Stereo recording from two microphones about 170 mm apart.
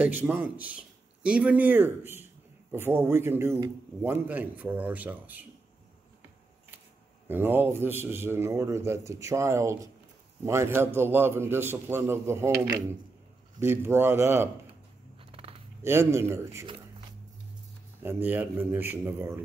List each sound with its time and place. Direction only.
0.2 s a man's voice: 10° right (ahead or behind)
7.2 s a man's voice: 10° right (ahead or behind)
13.6 s a man's voice: 15° right (ahead or behind)
15.4 s a sound: 35° right (ahead or behind)
15.8 s a man's voice: 15° right (ahead or behind)
18.0 s a man's voice: 10° right (ahead or behind)